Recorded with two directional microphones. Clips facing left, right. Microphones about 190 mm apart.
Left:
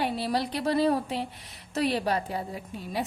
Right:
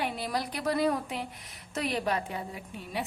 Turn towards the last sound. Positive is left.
turn(degrees=35)  # may be behind; listen again after turning